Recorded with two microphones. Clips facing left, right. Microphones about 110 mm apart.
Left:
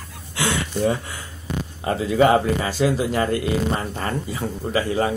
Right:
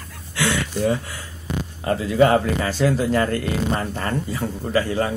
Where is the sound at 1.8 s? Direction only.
20° left (ahead or behind).